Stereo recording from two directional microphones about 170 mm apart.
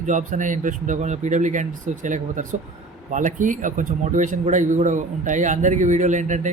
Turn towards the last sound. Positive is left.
turn(degrees=-45)  # may be behind; listen again after turning